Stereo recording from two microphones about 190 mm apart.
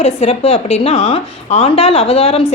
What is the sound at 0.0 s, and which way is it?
A woman's voice, 30° left (ahead or behind).